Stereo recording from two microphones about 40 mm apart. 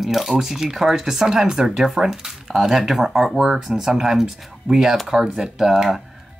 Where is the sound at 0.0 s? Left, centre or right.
Centre.